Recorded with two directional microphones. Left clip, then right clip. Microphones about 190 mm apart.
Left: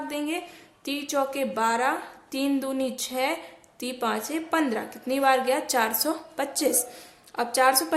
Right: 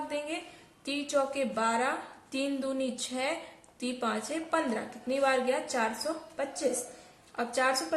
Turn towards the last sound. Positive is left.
turn(degrees=35)  # may be behind; listen again after turning